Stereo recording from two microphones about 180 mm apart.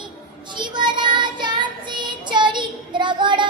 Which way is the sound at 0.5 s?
25° right (ahead or behind).